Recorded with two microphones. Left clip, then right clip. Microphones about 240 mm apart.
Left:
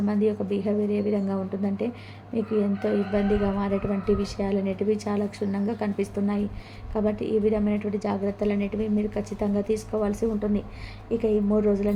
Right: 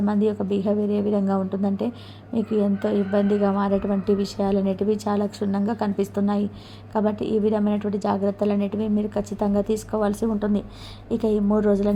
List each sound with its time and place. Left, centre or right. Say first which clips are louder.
0.0 s a woman's voice: right 2 dB; centre